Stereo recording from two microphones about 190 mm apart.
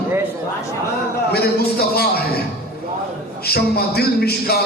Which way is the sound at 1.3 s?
55° left (ahead or behind).